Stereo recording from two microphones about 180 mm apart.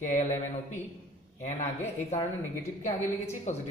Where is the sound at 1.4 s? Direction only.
40° left (ahead or behind).